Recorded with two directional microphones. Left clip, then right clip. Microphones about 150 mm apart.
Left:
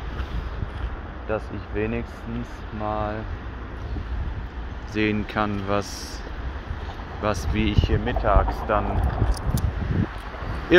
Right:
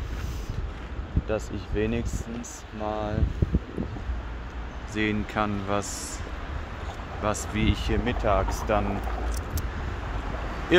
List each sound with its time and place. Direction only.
1.3 s speech: 40° right (ahead or behind)
4.9 s speech: 5° left (ahead or behind)
7.2 s speech: centre (ahead or behind)
7.8 s speech: 45° right (ahead or behind)
10.7 s speech: centre (ahead or behind)